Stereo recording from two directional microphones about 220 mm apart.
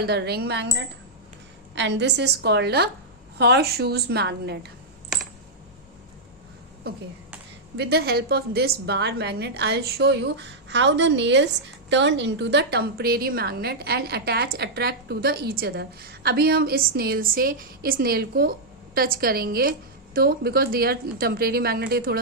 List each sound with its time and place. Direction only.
0.0 s a woman's voice: 45° right (ahead or behind)
7.8 s a woman's voice: 45° right (ahead or behind)